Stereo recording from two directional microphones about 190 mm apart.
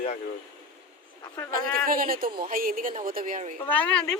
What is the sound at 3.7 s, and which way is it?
Speech, 10° left (ahead or behind).